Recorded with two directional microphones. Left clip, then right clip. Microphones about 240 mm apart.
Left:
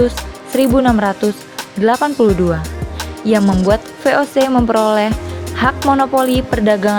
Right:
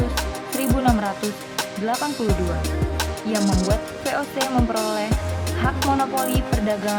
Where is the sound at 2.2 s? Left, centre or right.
Left.